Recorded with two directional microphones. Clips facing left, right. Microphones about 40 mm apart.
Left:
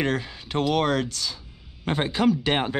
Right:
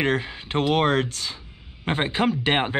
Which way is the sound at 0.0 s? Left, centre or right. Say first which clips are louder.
Right 2 dB; right.